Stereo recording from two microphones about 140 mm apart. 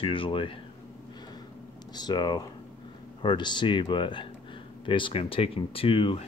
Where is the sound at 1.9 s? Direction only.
30° left (ahead or behind).